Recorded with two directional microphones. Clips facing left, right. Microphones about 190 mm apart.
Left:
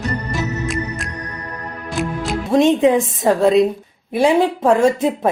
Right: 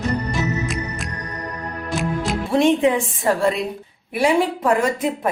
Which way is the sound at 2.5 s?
20° left (ahead or behind).